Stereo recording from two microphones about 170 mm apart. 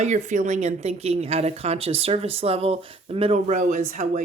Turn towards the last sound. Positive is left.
turn(degrees=-45)  # may be behind; listen again after turning